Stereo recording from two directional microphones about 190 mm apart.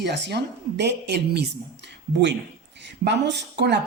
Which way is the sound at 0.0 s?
60° right (ahead or behind).